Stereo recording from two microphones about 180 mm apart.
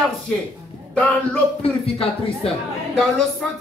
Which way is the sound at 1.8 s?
35° left (ahead or behind).